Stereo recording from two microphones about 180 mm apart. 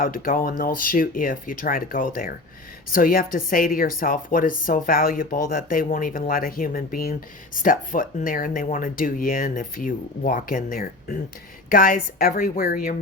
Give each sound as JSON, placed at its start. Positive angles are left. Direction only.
{"t": 0.0, "sound": "a woman's voice", "side_deg": 50}